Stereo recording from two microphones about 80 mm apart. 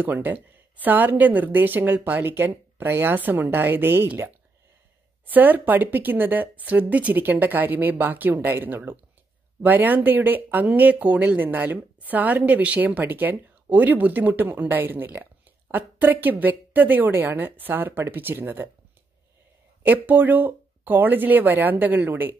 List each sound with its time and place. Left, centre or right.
0.0 s speech: right
5.2 s speech: right
19.8 s speech: right